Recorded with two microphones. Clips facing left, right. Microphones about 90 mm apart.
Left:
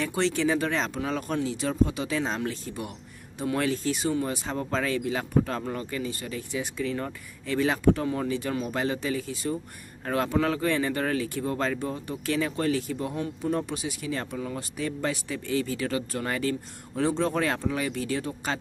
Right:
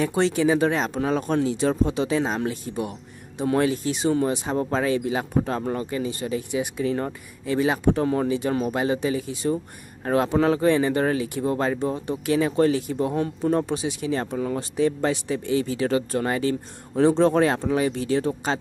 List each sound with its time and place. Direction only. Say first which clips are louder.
0.0 s speech: right 5 dB; 15° right (ahead or behind)
2.2 s speech: right 4 dB; 15° right (ahead or behind)
7.4 s speech: right 4 dB; 15° right (ahead or behind)
8.0 s speech: right 6 dB; 40° right (ahead or behind)
8.3 s speech: right 5 dB; 20° right (ahead or behind)
13.1 s speech: right 5 dB; 40° right (ahead or behind)